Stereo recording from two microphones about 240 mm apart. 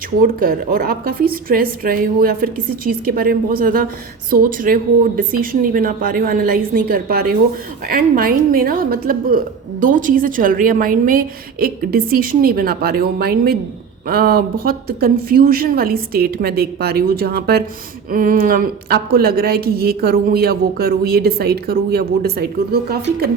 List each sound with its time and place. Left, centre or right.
0.2 s a woman's voice: right